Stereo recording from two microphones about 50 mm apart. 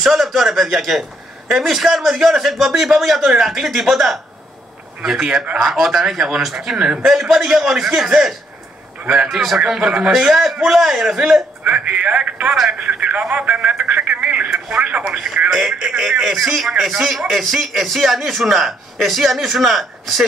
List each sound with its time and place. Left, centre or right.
0.0 s a man's voice: centre
5.2 s a man's voice: centre
10.1 s a man's voice: centre
11.6 s speech: right
15.1 s a man's voice: centre